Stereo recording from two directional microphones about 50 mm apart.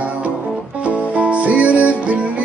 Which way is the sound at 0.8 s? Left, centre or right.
Right.